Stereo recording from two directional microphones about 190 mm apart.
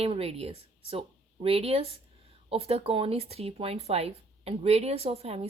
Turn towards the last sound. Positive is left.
turn(degrees=-35)  # may be behind; listen again after turning